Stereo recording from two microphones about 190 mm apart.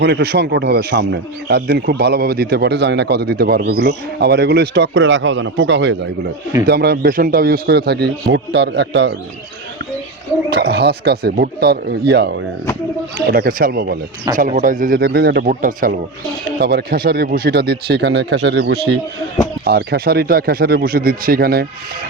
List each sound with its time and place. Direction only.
0.0 s speech: 60° right (ahead or behind)
6.7 s speech: 55° right (ahead or behind)
10.5 s speech: 60° right (ahead or behind)